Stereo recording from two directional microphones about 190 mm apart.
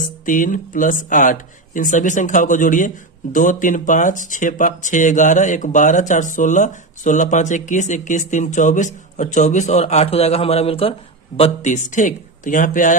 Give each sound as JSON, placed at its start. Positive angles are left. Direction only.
{"t": 0.3, "sound": "speech", "side_deg": 45}